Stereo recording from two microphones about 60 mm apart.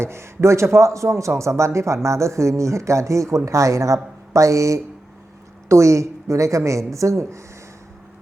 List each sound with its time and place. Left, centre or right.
0.0 s a woman's voice: right